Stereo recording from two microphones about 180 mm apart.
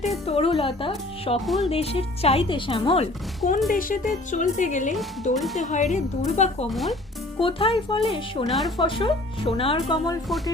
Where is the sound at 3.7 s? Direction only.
50° left (ahead or behind).